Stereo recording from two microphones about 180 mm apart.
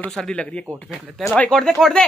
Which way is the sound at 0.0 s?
5° left (ahead or behind).